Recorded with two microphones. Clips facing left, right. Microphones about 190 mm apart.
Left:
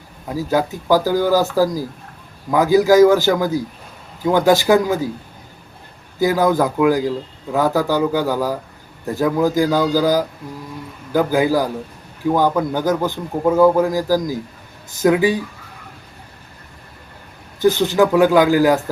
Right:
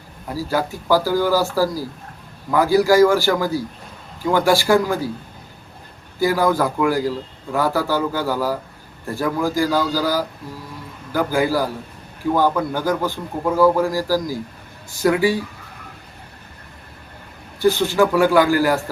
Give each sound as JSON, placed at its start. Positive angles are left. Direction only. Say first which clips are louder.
{"t": 0.3, "sound": "a man's voice", "louder": "left 3 dB", "side_deg": 15}
{"t": 6.1, "sound": "a man's voice", "louder": "left 2 dB", "side_deg": 20}
{"t": 17.6, "sound": "speech", "louder": "left 2 dB", "side_deg": 15}